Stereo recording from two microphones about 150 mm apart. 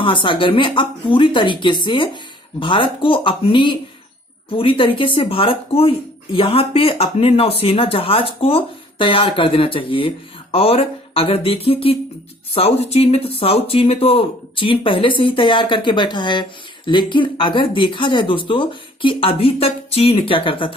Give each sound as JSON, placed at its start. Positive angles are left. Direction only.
{"t": 0.0, "sound": "speech", "side_deg": 35}